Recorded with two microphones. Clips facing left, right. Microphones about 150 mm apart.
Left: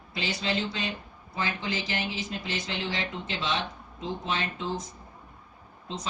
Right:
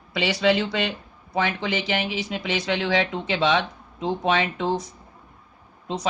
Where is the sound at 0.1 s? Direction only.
75° right (ahead or behind).